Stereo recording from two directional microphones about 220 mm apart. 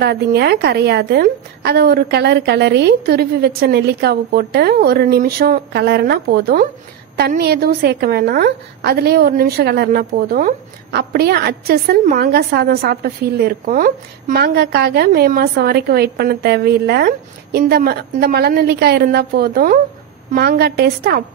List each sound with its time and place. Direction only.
0.0 s a woman's voice: 45° right (ahead or behind)